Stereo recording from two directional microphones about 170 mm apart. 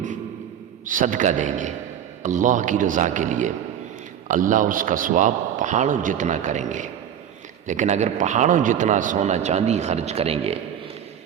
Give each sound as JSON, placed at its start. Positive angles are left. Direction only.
{"t": 0.9, "sound": "a man's voice", "side_deg": -50}